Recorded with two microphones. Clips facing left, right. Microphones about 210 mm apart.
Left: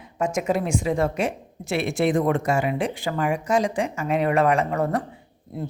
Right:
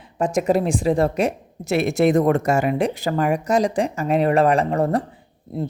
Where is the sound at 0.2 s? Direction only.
35° right (ahead or behind).